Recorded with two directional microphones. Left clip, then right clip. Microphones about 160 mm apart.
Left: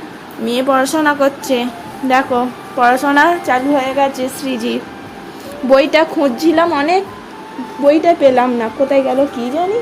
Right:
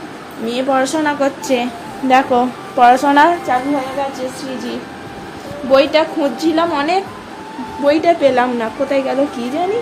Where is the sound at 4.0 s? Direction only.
55° left (ahead or behind); by 9.6 s 20° left (ahead or behind).